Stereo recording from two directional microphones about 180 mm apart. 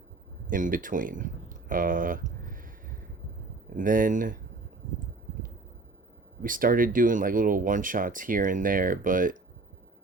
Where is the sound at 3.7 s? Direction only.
50° right (ahead or behind).